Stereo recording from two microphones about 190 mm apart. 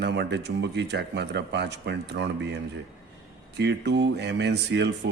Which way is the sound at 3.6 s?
65° right (ahead or behind).